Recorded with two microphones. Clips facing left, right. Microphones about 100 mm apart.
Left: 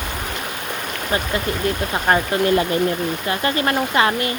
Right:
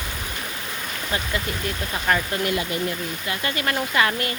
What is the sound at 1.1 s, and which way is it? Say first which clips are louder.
Speech: left 5 dB; 35° left (ahead or behind).